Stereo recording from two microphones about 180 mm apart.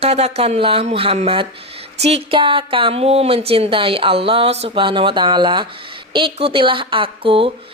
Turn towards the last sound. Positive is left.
turn(degrees=-30)  # may be behind; listen again after turning